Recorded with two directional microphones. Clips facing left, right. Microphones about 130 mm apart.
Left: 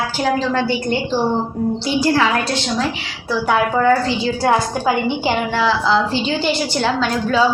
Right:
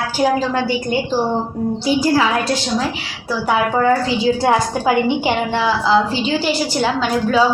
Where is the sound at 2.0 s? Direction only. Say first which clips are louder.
Left 1 dB; 10° right (ahead or behind).